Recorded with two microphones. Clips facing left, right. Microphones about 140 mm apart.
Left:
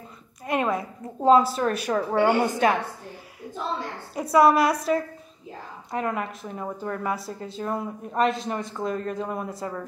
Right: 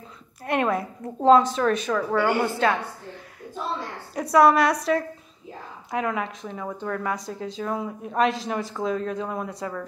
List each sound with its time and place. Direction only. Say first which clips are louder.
0.5 s a woman's voice: right 1 dB; centre (ahead or behind)
2.0 s a woman's voice: left 1 dB; 30° left (ahead or behind)
2.4 s a woman's voice: left 1 dB; 15° left (ahead or behind)
4.1 s a woman's voice: right 1 dB; centre (ahead or behind)